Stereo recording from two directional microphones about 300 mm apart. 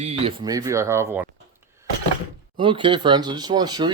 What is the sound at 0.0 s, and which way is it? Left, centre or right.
Speech, centre.